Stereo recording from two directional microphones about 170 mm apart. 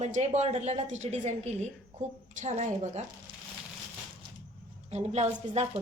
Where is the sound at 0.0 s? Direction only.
45° right (ahead or behind).